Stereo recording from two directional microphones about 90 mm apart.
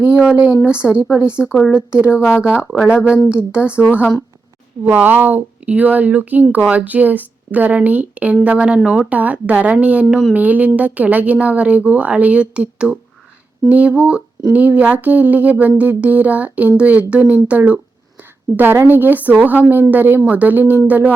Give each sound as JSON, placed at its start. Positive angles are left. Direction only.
{"t": 0.0, "sound": "speech", "side_deg": -10}
{"t": 2.6, "sound": "speech", "side_deg": 0}
{"t": 2.9, "sound": "speech", "side_deg": -10}
{"t": 9.0, "sound": "a woman's voice", "side_deg": -15}